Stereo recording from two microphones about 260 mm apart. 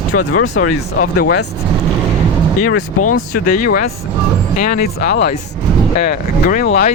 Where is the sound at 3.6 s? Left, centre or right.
Left.